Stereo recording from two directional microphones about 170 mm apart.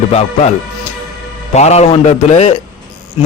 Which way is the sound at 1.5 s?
40° left (ahead or behind).